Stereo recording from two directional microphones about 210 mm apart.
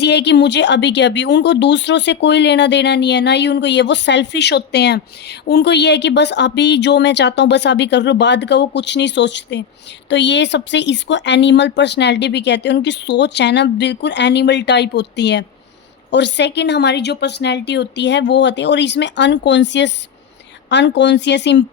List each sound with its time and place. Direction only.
0.0 s speech: 55° left (ahead or behind)